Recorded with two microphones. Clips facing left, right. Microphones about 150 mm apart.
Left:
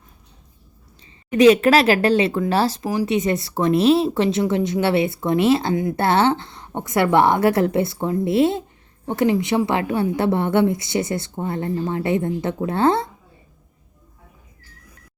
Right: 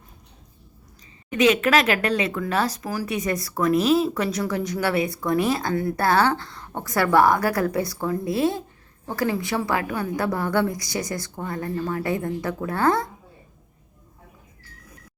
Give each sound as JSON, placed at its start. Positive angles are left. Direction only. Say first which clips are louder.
{"t": 1.3, "sound": "speech", "louder": "left 6 dB", "side_deg": 35}